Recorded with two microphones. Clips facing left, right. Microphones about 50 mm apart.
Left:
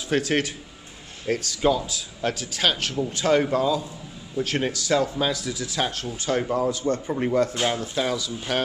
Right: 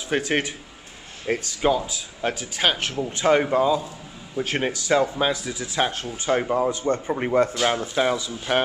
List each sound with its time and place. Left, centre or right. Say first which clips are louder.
0.1 s speech: even; centre